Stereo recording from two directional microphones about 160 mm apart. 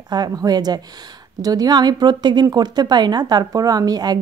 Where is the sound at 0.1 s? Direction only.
25° right (ahead or behind).